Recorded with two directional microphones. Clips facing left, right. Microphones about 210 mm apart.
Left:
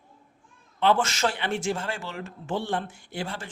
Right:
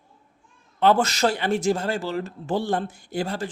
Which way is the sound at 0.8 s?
40° right (ahead or behind).